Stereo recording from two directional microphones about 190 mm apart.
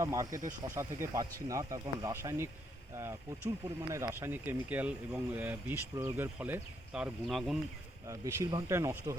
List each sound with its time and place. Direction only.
0.0 s speech: 15° right (ahead or behind); by 7.6 s centre (ahead or behind)
8.0 s speech: 15° right (ahead or behind)